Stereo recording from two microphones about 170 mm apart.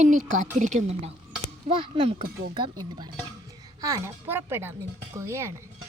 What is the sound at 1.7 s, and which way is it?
Speech, 30° right (ahead or behind).